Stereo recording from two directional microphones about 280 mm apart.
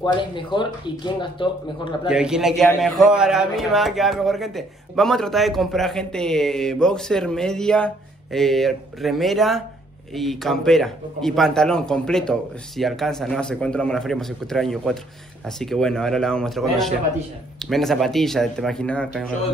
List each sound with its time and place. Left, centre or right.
0.0 s speech: centre
2.0 s a man's voice: centre